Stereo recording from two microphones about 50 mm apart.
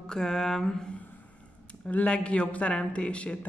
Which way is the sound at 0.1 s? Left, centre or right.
Centre.